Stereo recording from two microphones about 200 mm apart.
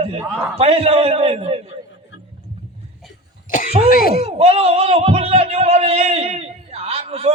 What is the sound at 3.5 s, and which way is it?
Speech, 45° left (ahead or behind).